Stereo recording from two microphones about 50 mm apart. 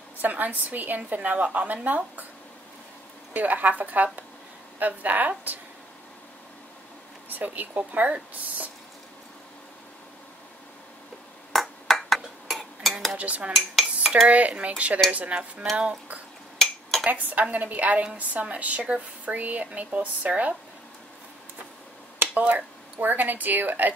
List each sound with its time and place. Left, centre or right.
0.2 s a woman's voice: right
3.3 s a woman's voice: right
7.2 s a woman's voice: right
11.5 s a sound: centre
13.2 s speech: right
13.6 s cutlery: centre
14.2 s speech: right
17.1 s a woman's voice: right
22.3 s speech: right